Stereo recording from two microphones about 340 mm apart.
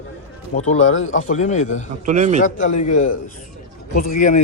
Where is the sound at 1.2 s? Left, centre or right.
Left.